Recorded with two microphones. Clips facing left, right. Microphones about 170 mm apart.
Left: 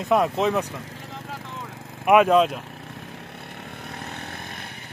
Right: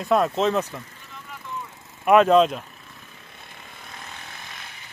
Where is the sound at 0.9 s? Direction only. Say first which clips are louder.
Left 7 dB; 80° left.